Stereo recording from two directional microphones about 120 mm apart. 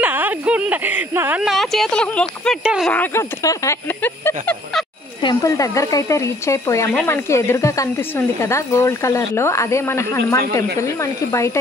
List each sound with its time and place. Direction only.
0.0 s a sound: 15° right (ahead or behind)
1.4 s speech: centre (ahead or behind)
2.6 s speech: 5° right (ahead or behind)
2.9 s speech: 15° left (ahead or behind)
5.2 s speech: 30° left (ahead or behind)